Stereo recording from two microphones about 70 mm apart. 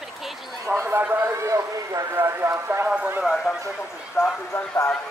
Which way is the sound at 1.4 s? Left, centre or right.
Right.